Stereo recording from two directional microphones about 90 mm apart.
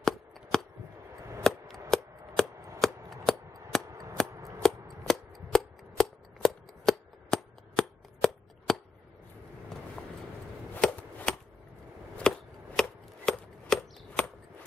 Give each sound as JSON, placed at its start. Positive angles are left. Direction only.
{"t": 0.0, "sound": "a sound", "side_deg": 5}
{"t": 2.4, "sound": "chopping", "side_deg": 5}
{"t": 2.8, "sound": "scissors", "side_deg": 5}
{"t": 4.3, "sound": "scissors", "side_deg": -35}
{"t": 4.6, "sound": "a sound", "side_deg": 5}
{"t": 10.7, "sound": "chop", "side_deg": 15}
{"t": 12.2, "sound": "chopping", "side_deg": 5}